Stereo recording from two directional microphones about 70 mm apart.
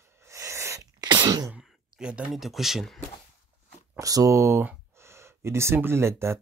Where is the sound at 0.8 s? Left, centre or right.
Right.